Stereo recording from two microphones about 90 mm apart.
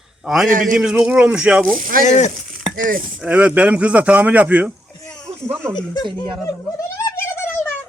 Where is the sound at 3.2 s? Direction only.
15° right (ahead or behind).